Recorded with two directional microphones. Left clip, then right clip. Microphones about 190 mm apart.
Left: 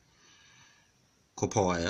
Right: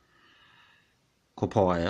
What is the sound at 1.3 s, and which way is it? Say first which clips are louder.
Speech: right 4 dB; 30° right (ahead or behind).